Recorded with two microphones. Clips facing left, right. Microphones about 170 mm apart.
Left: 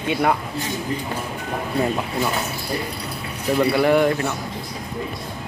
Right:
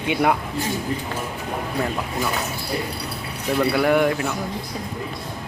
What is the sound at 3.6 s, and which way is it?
Speech, centre (ahead or behind).